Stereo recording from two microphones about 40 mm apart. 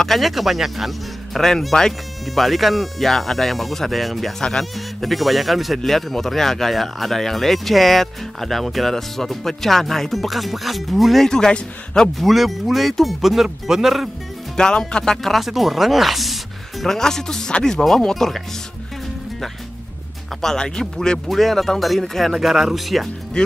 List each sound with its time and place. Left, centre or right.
0.0 s speech: centre
1.4 s a man's voice: centre
4.4 s a man's voice: centre
4.7 s speech: centre
11.2 s a man's voice: centre
12.2 s speech: centre
14.6 s speech: centre
15.2 s speech: centre
16.8 s a man's voice: centre
20.4 s a man's voice: centre
21.3 s speech: centre
22.3 s speech: centre